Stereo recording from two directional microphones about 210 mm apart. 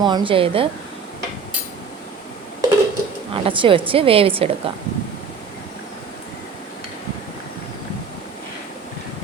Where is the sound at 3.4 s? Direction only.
25° right (ahead or behind).